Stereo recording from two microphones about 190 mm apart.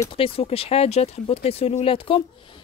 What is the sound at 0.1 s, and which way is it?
A woman's voice, 30° left (ahead or behind).